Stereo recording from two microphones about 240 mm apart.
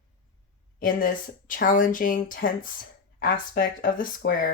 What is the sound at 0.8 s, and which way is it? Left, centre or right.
Speech, left.